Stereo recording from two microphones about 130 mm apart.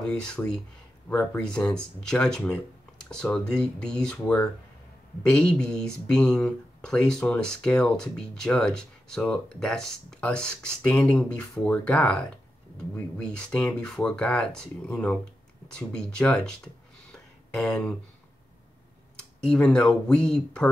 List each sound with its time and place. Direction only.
0.4 s speech: 10° left (ahead or behind)
19.4 s speech: 5° left (ahead or behind)